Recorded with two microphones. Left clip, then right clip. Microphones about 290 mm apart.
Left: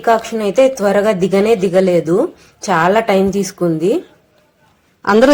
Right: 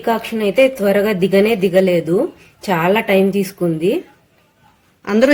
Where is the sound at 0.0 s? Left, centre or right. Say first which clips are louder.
Left 4 dB; centre.